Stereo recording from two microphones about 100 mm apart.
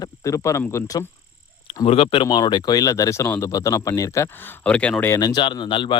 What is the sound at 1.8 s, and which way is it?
Speech, 65° left (ahead or behind).